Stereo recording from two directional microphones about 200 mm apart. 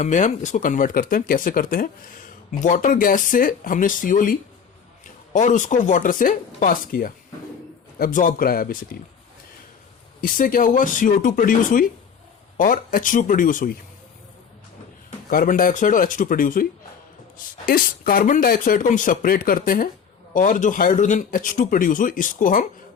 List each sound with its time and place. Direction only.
0.0 s speech: 40° left (ahead or behind)
10.2 s speech: 45° left (ahead or behind)
15.3 s speech: 45° left (ahead or behind)